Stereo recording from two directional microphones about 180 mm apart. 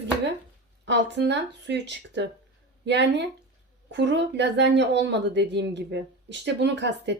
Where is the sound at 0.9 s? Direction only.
75° right (ahead or behind).